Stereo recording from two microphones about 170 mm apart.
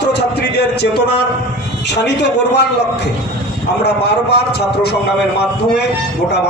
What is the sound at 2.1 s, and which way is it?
Speech, 90° left.